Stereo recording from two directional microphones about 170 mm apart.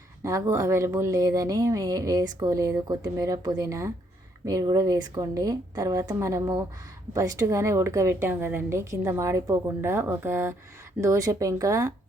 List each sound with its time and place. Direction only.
0.2 s a woman's voice: 20° right (ahead or behind)